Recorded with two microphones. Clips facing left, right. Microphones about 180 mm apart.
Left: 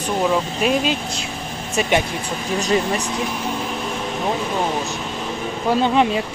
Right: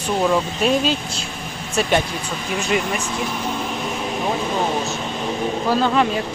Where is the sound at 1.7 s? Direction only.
15° left (ahead or behind).